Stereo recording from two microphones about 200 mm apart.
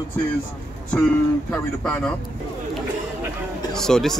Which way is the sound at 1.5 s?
5° left (ahead or behind).